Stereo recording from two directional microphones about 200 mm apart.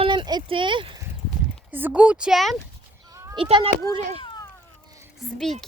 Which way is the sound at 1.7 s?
10° right (ahead or behind).